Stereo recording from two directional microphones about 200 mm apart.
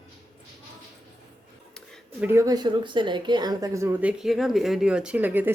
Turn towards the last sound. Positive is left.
turn(degrees=-10)  # may be behind; listen again after turning